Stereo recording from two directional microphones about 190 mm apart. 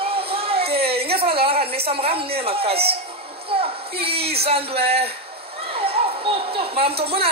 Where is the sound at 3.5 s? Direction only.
30° right (ahead or behind).